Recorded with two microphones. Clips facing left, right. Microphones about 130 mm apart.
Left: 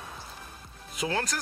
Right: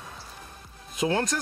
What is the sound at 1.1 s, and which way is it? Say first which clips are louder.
Speech: right 4 dB; 25° right (ahead or behind).